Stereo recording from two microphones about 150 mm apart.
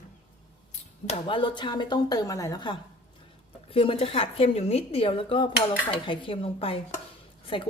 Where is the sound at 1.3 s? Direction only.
35° left (ahead or behind).